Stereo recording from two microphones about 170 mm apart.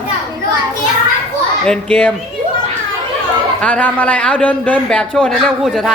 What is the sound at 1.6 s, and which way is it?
Speech, 5° left (ahead or behind).